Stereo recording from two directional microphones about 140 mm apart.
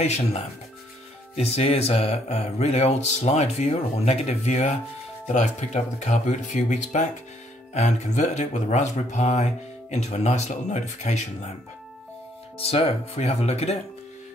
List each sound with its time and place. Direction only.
0.0 s speech: 50° left (ahead or behind)
12.5 s speech: 45° left (ahead or behind)